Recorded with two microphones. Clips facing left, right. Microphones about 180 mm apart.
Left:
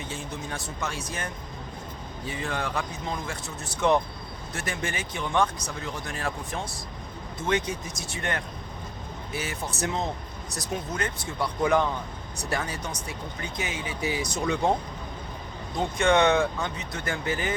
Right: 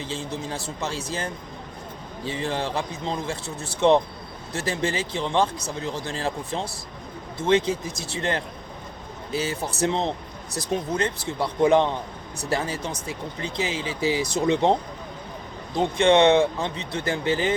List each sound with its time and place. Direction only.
0.0 s speech: 30° right (ahead or behind)